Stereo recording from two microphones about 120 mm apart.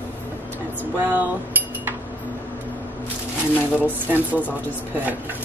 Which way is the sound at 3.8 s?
15° right (ahead or behind).